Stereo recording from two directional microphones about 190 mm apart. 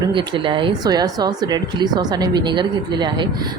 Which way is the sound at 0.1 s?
25° right (ahead or behind).